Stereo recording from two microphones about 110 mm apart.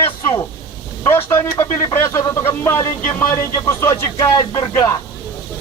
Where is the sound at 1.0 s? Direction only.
25° left (ahead or behind).